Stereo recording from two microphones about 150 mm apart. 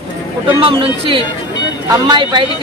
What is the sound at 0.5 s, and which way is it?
Speech, 35° right (ahead or behind).